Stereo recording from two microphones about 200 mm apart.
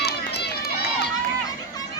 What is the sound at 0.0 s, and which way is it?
Run, 55° left (ahead or behind).